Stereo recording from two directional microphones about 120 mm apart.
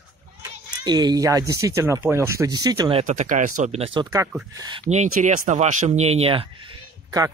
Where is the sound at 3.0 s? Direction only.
90° right.